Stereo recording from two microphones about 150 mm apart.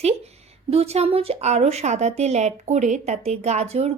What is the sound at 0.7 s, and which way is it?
A woman's voice, 45° right (ahead or behind).